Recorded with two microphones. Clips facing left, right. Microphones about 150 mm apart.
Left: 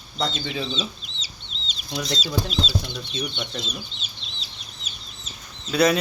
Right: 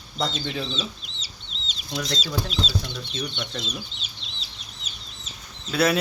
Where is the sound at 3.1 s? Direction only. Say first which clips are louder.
Left 2 dB; 15° left (ahead or behind).